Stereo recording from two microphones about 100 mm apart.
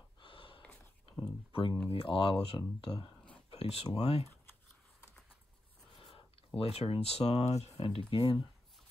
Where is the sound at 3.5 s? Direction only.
85° left.